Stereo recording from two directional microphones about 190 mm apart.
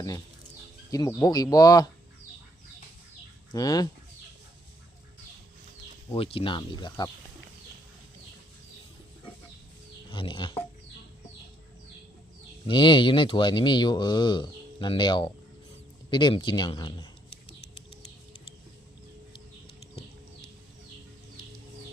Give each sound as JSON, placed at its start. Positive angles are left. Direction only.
{"t": 0.9, "sound": "speech", "side_deg": 20}
{"t": 3.5, "sound": "speech", "side_deg": 20}
{"t": 6.1, "sound": "speech", "side_deg": 30}
{"t": 10.1, "sound": "speech", "side_deg": 25}
{"t": 12.6, "sound": "speech", "side_deg": 25}